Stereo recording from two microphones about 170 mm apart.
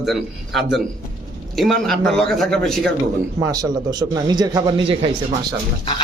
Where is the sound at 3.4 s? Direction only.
20° right (ahead or behind).